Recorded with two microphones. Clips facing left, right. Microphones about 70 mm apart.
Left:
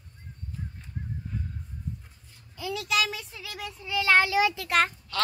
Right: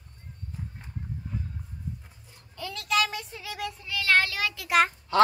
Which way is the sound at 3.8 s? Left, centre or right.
Left.